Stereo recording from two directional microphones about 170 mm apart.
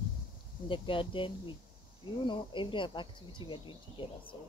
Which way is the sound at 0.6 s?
30° left (ahead or behind).